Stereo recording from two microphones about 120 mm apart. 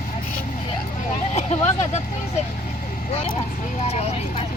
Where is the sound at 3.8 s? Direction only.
60° left (ahead or behind).